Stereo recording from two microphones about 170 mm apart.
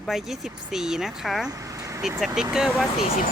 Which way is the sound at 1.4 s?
20° right (ahead or behind).